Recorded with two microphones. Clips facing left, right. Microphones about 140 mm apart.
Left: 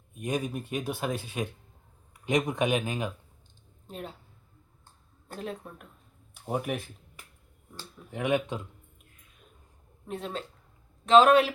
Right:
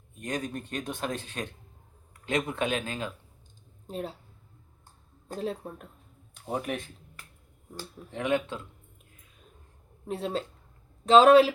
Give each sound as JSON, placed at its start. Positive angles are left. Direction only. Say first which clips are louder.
{"t": 0.2, "sound": "speech", "louder": "left 2 dB", "side_deg": 10}
{"t": 3.8, "sound": "speech", "louder": "right 5 dB", "side_deg": -35}
{"t": 5.4, "sound": "speech", "louder": "right 4 dB", "side_deg": -30}
{"t": 6.3, "sound": "speech", "louder": "left 1 dB", "side_deg": 5}
{"t": 8.1, "sound": "speech", "louder": "left 1 dB", "side_deg": 15}
{"t": 10.1, "sound": "speech", "louder": "right 4 dB", "side_deg": -35}